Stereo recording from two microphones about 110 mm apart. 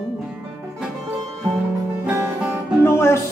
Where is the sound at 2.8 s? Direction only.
20° left (ahead or behind).